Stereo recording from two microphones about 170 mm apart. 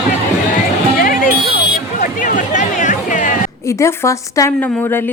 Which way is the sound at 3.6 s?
15° left (ahead or behind).